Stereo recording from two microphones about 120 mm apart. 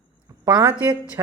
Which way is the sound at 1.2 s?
25° right (ahead or behind).